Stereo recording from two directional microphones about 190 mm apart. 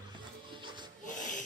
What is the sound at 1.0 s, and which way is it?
Wheeze, 40° left (ahead or behind).